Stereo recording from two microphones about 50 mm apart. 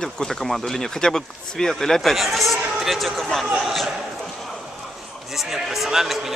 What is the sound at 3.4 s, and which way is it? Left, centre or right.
Speech, centre.